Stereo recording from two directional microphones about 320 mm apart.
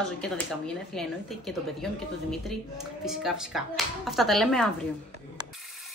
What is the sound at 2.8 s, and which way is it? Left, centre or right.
A woman's voice, centre.